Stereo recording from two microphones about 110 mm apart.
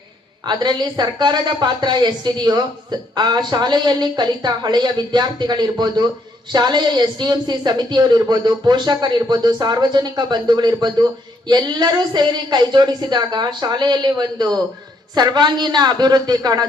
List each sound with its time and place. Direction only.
0.4 s speech: 45° right (ahead or behind)